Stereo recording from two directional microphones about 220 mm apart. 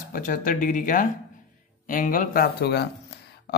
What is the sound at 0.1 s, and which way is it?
Speech, 40° left (ahead or behind).